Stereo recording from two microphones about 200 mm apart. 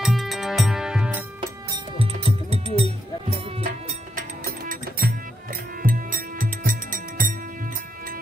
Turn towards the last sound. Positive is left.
turn(degrees=-45)  # may be behind; listen again after turning